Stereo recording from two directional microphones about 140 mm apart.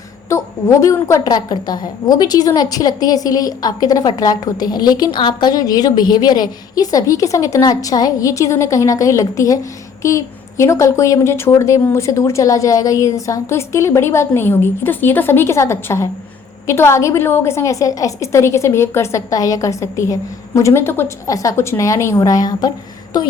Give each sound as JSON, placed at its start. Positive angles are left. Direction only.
{"t": 0.3, "sound": "a woman's voice", "side_deg": 20}